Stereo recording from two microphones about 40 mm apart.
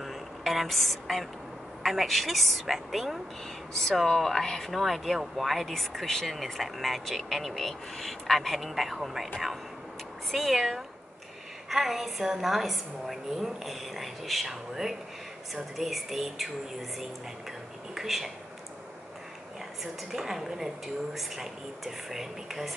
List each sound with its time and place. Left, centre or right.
0.0 s a sound: centre
1.8 s speech: centre
10.3 s a woman's voice: centre
17.9 s speech: centre
19.8 s a woman's voice: centre